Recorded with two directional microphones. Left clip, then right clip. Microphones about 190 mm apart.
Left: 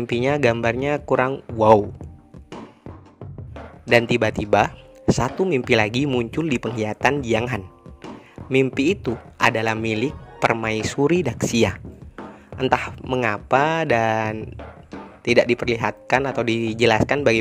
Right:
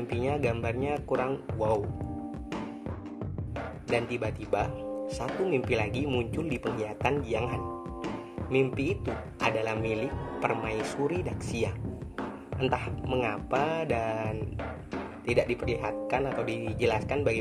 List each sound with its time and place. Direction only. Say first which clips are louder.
0.0 s speech: left 10 dB; 55° left (ahead or behind)
3.9 s speech: left 13 dB; 55° left (ahead or behind)